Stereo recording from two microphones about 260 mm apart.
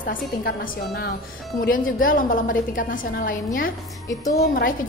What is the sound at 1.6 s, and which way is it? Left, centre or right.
A woman's voice, left.